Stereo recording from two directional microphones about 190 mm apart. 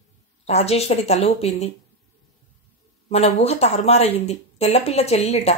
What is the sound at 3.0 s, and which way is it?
Speech, 35° left (ahead or behind).